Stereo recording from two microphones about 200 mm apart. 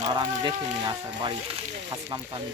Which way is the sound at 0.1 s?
20° right (ahead or behind).